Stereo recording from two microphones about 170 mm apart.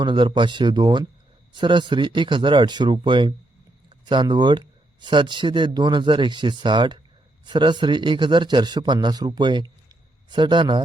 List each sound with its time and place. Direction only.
0.0 s speech: 30° right (ahead or behind)